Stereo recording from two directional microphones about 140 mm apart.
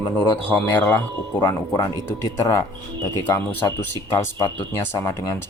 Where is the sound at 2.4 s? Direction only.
20° left (ahead or behind).